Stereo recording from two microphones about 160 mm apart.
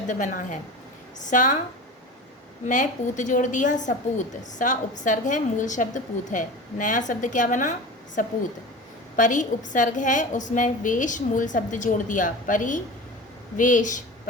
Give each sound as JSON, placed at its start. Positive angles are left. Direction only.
{"t": 0.1, "sound": "a woman's voice", "side_deg": 50}
{"t": 2.6, "sound": "a woman's voice", "side_deg": 50}